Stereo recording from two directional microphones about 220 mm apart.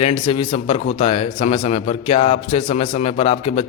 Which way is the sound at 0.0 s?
25° left (ahead or behind).